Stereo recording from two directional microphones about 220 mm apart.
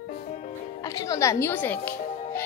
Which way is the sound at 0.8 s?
15° left (ahead or behind).